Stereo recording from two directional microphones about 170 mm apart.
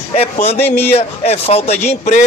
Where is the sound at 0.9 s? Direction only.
40° left (ahead or behind).